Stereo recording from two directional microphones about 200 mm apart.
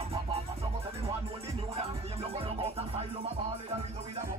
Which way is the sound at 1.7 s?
30° right (ahead or behind).